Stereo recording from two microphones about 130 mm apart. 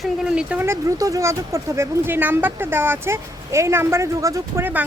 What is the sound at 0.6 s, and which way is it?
Speech, 20° right (ahead or behind).